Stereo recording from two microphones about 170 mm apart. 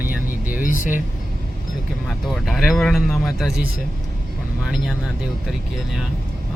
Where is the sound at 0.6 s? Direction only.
50° left (ahead or behind).